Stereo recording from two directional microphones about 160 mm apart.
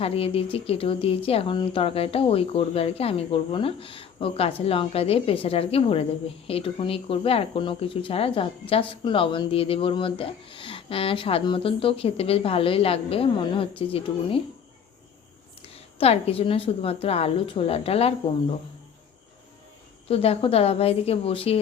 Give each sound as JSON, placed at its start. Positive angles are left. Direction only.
{"t": 0.0, "sound": "speech", "side_deg": 35}
{"t": 15.6, "sound": "speech", "side_deg": 40}
{"t": 20.1, "sound": "speech", "side_deg": 40}